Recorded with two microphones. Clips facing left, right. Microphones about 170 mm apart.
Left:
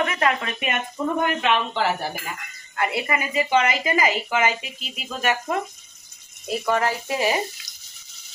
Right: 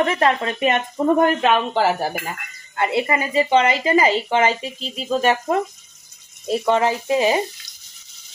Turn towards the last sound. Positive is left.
turn(degrees=-20)  # may be behind; listen again after turning